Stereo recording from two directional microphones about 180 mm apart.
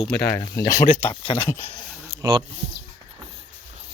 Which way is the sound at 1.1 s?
30° left (ahead or behind).